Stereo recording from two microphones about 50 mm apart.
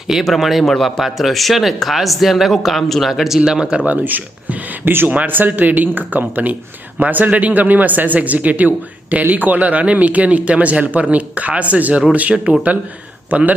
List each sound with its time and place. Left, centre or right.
0.3 s speech: centre
0.6 s speech: centre
3.8 s a man's voice: right